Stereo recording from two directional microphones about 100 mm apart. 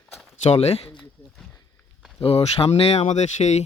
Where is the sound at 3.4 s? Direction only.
65° left (ahead or behind).